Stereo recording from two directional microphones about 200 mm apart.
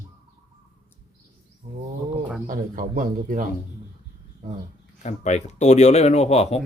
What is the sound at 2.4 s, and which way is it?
A man's voice, 45° right (ahead or behind).